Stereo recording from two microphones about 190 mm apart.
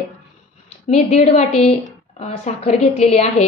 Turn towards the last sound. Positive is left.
turn(degrees=35)  # may be behind; listen again after turning